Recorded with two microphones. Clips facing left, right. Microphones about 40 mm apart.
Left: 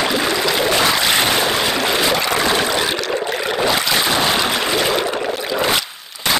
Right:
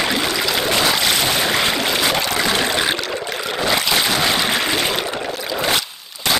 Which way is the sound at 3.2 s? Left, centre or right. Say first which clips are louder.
Left 4 dB; left.